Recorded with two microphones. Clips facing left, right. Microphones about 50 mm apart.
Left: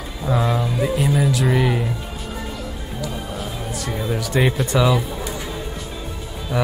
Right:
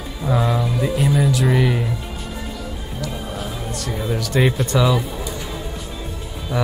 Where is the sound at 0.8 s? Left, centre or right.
Centre.